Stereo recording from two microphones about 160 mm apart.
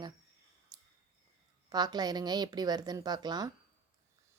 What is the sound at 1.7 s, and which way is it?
A woman's voice, 25° right (ahead or behind).